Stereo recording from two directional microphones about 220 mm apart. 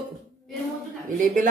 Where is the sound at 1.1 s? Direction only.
35° right (ahead or behind).